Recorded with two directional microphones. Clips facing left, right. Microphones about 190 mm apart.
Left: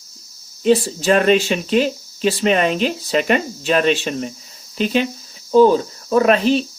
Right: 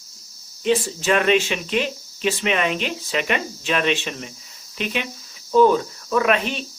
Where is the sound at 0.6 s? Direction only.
35° left (ahead or behind).